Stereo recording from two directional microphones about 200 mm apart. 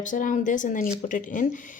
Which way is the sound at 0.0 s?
40° left (ahead or behind).